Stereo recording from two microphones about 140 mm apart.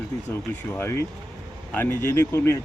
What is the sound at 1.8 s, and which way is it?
Speech, 20° left (ahead or behind).